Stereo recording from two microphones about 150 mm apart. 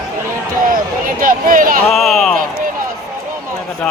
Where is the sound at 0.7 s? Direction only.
65° right (ahead or behind).